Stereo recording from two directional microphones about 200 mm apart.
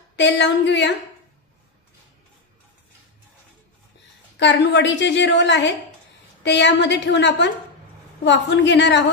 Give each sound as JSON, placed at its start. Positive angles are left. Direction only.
{"t": 0.1, "sound": "a woman's voice", "side_deg": 60}
{"t": 4.4, "sound": "a woman's voice", "side_deg": 60}